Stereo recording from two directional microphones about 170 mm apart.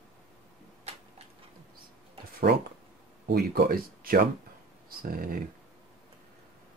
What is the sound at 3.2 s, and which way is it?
Speech, 70° right (ahead or behind).